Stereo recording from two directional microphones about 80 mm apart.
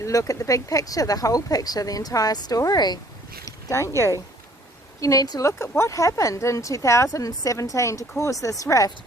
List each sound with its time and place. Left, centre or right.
0.0 s speech: left
3.4 s speech: left
5.4 s a woman's voice: left